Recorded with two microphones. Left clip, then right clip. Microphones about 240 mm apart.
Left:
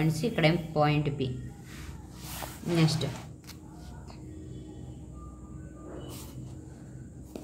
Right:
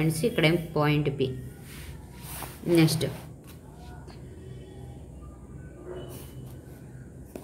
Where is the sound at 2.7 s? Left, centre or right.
Centre.